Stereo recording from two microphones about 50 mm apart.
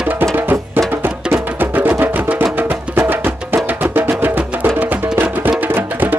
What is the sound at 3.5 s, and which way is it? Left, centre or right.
Music, right.